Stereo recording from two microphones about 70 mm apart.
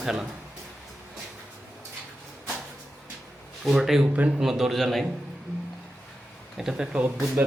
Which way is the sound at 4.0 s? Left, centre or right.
Centre.